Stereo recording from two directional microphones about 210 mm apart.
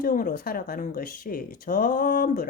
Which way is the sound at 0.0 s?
40° left (ahead or behind).